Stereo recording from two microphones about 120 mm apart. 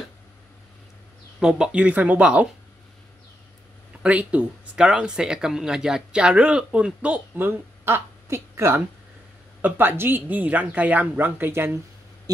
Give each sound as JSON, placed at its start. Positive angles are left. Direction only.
{"t": 1.4, "sound": "speech", "side_deg": -5}
{"t": 4.0, "sound": "speech", "side_deg": -10}